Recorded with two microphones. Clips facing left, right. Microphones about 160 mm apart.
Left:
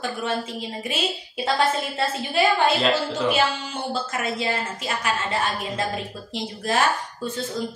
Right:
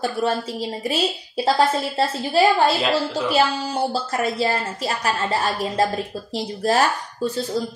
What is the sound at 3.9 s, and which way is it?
A woman's voice, 35° right (ahead or behind).